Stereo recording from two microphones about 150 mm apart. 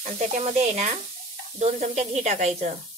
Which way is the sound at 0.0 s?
55° right (ahead or behind).